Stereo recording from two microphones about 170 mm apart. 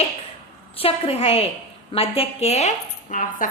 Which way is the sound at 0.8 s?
35° left (ahead or behind).